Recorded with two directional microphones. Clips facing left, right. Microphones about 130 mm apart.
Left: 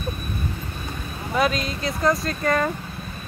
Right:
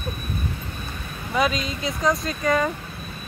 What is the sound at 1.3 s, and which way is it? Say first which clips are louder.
Speech: left 1 dB; centre (ahead or behind).